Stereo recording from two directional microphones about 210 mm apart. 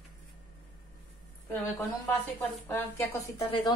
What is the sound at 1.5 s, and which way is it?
A woman's voice, 10° left (ahead or behind).